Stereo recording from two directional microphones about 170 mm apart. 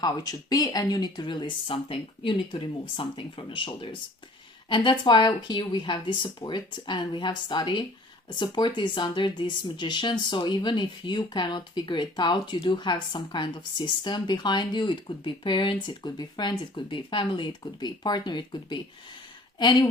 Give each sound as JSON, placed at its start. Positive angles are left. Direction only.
{"t": 0.0, "sound": "speech", "side_deg": 20}